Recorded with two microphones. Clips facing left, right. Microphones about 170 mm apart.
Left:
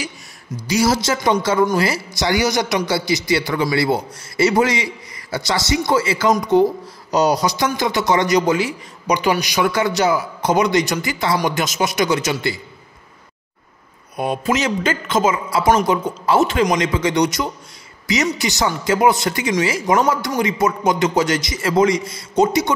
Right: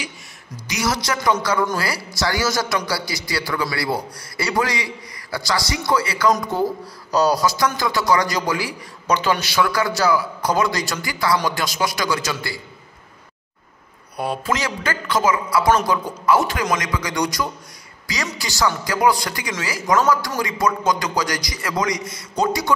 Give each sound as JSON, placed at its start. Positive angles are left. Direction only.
{"t": 0.7, "sound": "speech", "side_deg": 30}
{"t": 14.1, "sound": "speech", "side_deg": 20}